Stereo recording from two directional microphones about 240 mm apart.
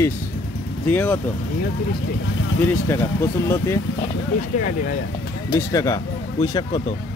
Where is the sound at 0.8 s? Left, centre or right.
Centre.